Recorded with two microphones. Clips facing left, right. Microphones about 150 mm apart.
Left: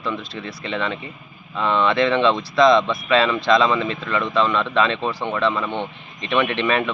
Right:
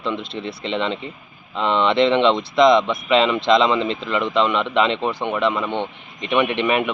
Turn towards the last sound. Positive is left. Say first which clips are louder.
# right 1 dB
turn(degrees=-15)  # may be behind; listen again after turning